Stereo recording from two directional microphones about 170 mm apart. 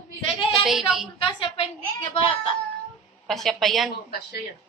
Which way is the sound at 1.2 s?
30° left (ahead or behind).